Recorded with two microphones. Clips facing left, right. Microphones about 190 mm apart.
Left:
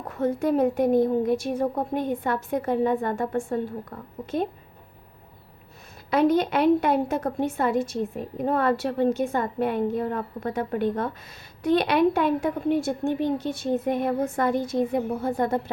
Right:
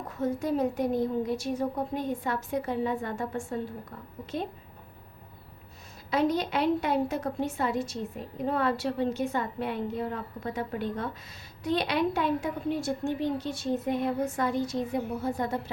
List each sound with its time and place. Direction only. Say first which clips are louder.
0.1 s a woman's voice: left 5 dB; 60° left (ahead or behind)
6.1 s a woman's voice: left 6 dB; 55° left (ahead or behind)